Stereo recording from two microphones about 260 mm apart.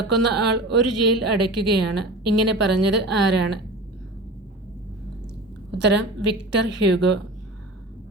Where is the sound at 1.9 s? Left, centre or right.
Right.